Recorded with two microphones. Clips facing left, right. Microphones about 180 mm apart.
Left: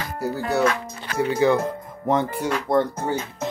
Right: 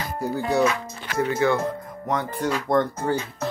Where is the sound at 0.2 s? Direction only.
Centre (ahead or behind).